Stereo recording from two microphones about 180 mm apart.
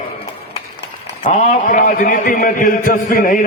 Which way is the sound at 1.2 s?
45° left (ahead or behind).